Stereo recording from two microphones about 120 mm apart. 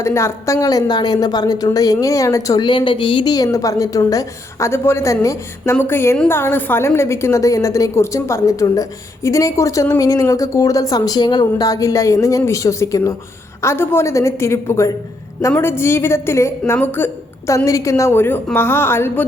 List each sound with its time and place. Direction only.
0.0 s a woman's voice: 25° left (ahead or behind)